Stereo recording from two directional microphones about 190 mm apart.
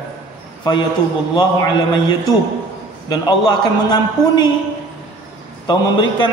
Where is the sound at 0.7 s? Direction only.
25° left (ahead or behind).